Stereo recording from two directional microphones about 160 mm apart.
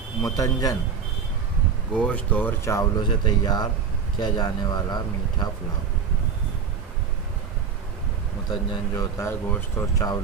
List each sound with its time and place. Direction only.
0.2 s speech: 20° left (ahead or behind)
2.0 s speech: 10° left (ahead or behind); by 5.5 s 25° left (ahead or behind)
8.5 s speech: 25° left (ahead or behind)